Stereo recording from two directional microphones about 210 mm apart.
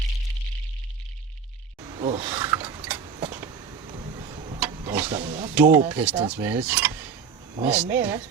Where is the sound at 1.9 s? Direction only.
25° right (ahead or behind).